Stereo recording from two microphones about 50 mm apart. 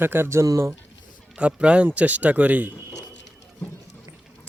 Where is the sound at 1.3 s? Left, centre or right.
Right.